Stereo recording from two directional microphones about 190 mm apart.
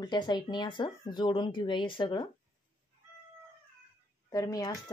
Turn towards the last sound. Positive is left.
turn(degrees=20)  # may be behind; listen again after turning